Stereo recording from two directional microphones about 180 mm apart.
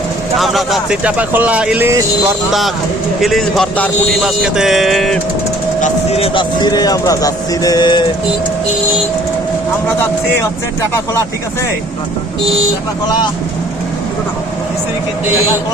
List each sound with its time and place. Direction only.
0.3 s speech: centre (ahead or behind)
2.5 s speech: centre (ahead or behind)
5.8 s speech: 35° left (ahead or behind)
13.1 s speech: 25° left (ahead or behind)